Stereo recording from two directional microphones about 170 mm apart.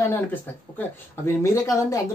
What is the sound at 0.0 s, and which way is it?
Speech, 10° left (ahead or behind).